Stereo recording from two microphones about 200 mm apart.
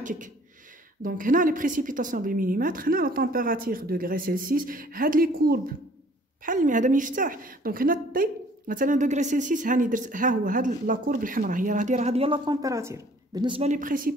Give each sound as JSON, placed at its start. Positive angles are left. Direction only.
{"t": 0.0, "sound": "beatboxing", "side_deg": -40}
{"t": 1.0, "sound": "a woman's voice", "side_deg": -40}
{"t": 13.6, "sound": "a woman's voice", "side_deg": -40}